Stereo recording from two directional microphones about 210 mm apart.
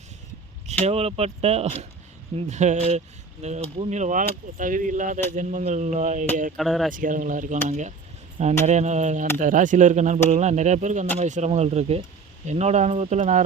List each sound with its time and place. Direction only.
0.9 s speech: 30° right (ahead or behind)
6.6 s speech: centre (ahead or behind)
6.9 s speech: 40° right (ahead or behind)